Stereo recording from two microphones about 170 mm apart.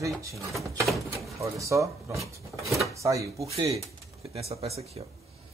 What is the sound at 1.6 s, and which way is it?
Speech, 15° right (ahead or behind).